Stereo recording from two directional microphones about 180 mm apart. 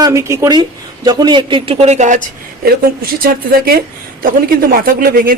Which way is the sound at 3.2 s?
55° right (ahead or behind).